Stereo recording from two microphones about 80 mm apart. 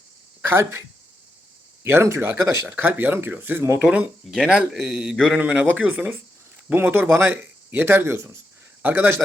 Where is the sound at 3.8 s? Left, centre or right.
Centre.